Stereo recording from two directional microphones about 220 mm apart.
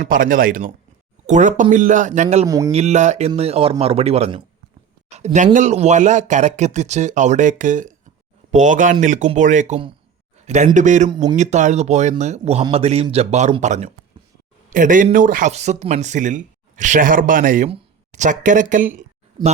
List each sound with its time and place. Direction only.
0.0 s speech: 40° right (ahead or behind)
2.5 s speech: 15° right (ahead or behind)
2.7 s a man's voice: 30° right (ahead or behind)